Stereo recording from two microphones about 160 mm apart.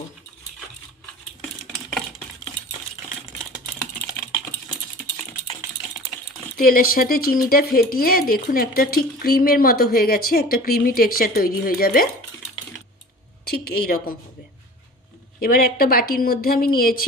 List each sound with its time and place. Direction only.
6.6 s speech: 65° left (ahead or behind)
13.4 s a woman's voice: 75° left (ahead or behind)
15.4 s speech: 70° left (ahead or behind)